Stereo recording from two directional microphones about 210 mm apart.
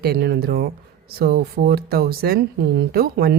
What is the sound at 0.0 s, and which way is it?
Speech, 50° right (ahead or behind).